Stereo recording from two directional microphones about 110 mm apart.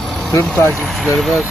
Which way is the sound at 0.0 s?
5° left (ahead or behind).